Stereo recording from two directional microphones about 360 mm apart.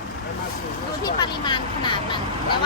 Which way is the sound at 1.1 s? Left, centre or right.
Centre.